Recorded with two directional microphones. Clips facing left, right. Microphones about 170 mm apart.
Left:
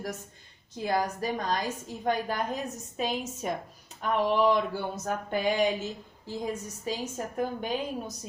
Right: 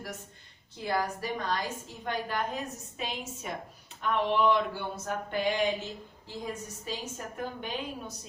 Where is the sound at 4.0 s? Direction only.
40° left (ahead or behind).